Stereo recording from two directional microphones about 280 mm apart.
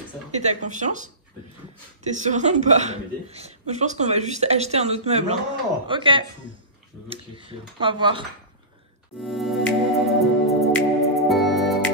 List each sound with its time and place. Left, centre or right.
0.4 s a woman's voice: right
9.2 s music: centre